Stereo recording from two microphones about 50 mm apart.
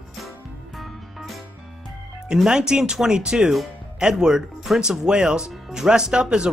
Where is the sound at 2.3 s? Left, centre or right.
Centre.